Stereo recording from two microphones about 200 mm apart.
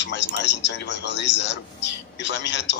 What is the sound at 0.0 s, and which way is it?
Speech, 60° left (ahead or behind).